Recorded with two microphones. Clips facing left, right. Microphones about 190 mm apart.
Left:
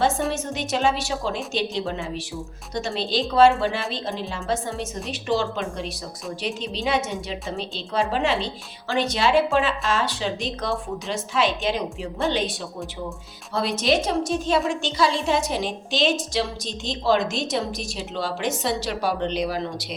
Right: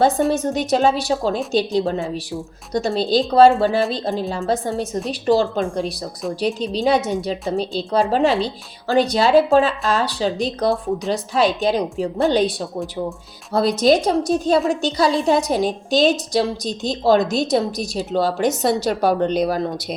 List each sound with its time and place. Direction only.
0.3 s a woman's voice: 35° right (ahead or behind)